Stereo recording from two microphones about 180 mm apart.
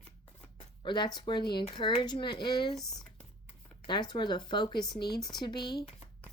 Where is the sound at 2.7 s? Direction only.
Centre (ahead or behind).